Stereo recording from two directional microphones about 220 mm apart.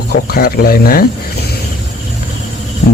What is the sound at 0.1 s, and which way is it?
Speech, 45° left (ahead or behind).